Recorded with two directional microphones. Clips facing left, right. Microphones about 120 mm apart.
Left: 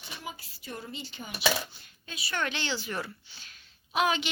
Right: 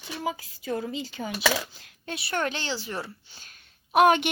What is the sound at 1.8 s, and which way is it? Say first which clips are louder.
Speech: right 7 dB; 70° right (ahead or behind).